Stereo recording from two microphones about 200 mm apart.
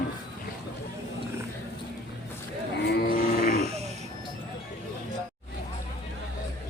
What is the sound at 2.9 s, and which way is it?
Livestock, 45° left (ahead or behind).